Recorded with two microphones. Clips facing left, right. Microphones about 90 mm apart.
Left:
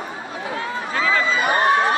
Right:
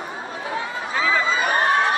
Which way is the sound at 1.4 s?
15° left (ahead or behind).